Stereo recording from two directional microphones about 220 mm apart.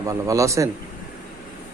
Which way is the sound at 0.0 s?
15° right (ahead or behind).